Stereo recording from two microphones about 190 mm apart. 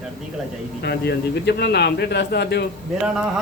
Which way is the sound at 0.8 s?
60° left (ahead or behind).